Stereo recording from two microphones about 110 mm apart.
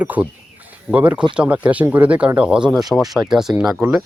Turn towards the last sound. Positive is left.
turn(degrees=-5)  # may be behind; listen again after turning